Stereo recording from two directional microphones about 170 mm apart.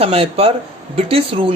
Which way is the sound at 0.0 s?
35° right (ahead or behind).